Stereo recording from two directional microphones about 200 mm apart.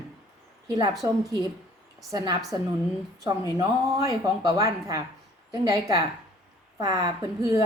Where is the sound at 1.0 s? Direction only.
15° right (ahead or behind).